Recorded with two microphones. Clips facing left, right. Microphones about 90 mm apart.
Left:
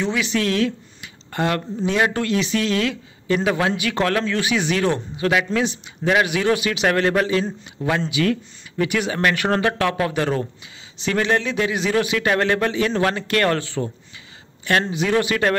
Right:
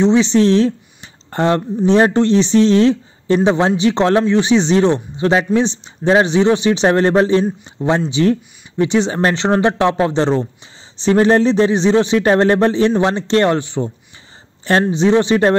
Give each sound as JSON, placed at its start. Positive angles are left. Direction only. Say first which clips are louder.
{"t": 0.0, "sound": "a man's voice", "louder": "right 10 dB", "side_deg": -30}
{"t": 14.6, "sound": "speech", "louder": "right 6 dB", "side_deg": -30}